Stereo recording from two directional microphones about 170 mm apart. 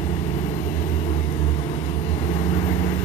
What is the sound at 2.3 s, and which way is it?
Vehicle, 35° left (ahead or behind).